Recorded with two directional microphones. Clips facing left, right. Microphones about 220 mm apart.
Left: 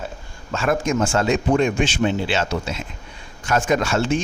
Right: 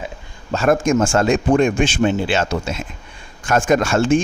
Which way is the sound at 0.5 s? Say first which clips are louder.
Right 5 dB; 45° right (ahead or behind).